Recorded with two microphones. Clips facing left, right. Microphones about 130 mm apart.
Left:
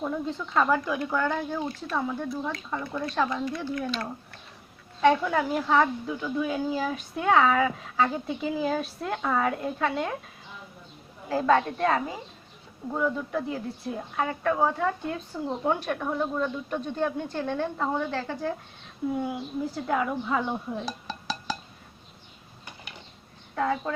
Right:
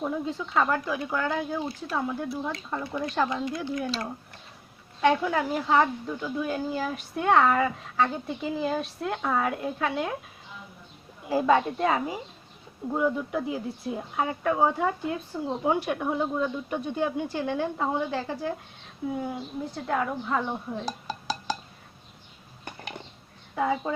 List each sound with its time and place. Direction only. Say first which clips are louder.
0.0 s a woman's voice: even; 5° right (ahead or behind)
3.4 s speech: even; 15° right (ahead or behind)
4.9 s a woman's voice: left 1 dB; centre (ahead or behind)
11.3 s a woman's voice: even; 10° right (ahead or behind)
22.6 s a sound: right 6 dB; 55° right (ahead or behind)
23.6 s speech: right 1 dB; 10° right (ahead or behind)